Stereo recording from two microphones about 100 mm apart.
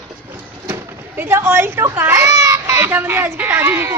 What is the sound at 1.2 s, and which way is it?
A child's voice, 25° right (ahead or behind).